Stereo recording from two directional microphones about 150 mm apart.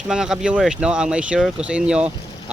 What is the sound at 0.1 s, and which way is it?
Speech, 5° right (ahead or behind).